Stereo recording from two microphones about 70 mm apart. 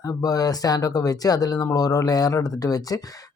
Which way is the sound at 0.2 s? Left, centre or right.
Left.